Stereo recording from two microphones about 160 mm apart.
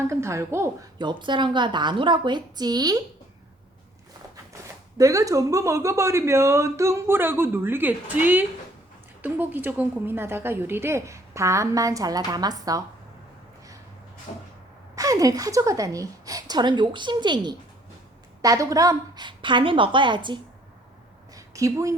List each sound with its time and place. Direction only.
0.1 s a woman's voice: 15° right (ahead or behind)
0.9 s a woman's voice: 30° right (ahead or behind)
4.9 s a woman's voice: 20° right (ahead or behind)
14.3 s cupboard open or close: 50° left (ahead or behind)
14.9 s a woman's voice: 20° right (ahead or behind)
21.3 s a sound: 20° right (ahead or behind)